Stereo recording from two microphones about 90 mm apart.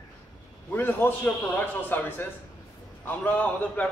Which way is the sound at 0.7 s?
20° left (ahead or behind).